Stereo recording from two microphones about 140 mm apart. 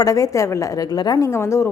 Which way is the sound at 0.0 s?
25° left (ahead or behind).